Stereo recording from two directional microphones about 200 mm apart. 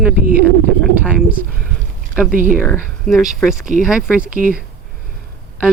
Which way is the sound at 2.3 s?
45° right (ahead or behind).